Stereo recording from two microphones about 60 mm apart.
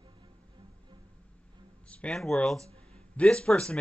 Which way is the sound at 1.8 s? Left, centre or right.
Centre.